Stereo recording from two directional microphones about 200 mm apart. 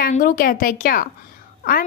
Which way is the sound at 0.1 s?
45° left (ahead or behind).